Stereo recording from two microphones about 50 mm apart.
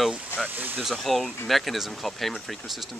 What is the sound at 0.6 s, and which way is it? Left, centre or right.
Speech, right.